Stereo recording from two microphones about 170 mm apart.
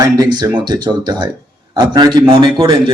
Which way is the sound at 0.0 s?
25° right (ahead or behind).